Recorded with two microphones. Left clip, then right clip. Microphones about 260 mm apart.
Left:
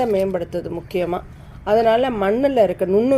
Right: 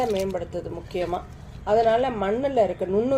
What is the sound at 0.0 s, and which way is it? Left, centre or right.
Speech, left.